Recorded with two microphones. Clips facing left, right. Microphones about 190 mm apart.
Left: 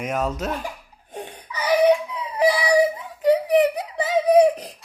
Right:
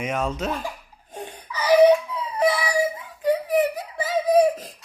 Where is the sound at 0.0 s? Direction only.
Centre (ahead or behind).